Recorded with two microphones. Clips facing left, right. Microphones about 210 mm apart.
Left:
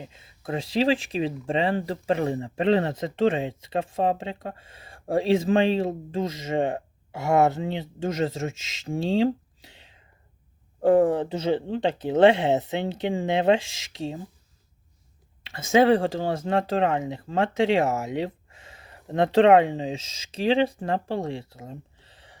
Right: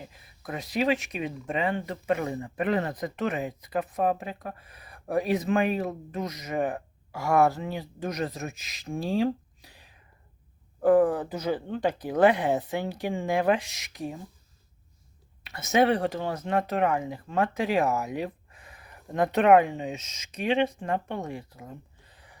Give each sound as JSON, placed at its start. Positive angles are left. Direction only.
{"t": 0.0, "sound": "speech", "side_deg": 25}
{"t": 15.5, "sound": "speech", "side_deg": 25}